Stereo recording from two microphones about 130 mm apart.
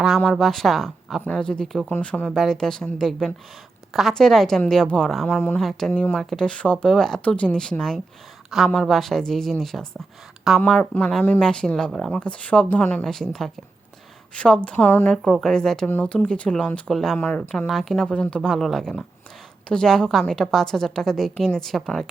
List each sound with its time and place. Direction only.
0.3 s speech: centre (ahead or behind)
5.3 s speech: 15° left (ahead or behind)
5.5 s speech: 5° left (ahead or behind)
10.9 s speech: 15° left (ahead or behind)
11.3 s speech: 5° left (ahead or behind)
14.3 s speech: 5° left (ahead or behind)
15.1 s speech: 5° left (ahead or behind)
17.2 s speech: 15° left (ahead or behind)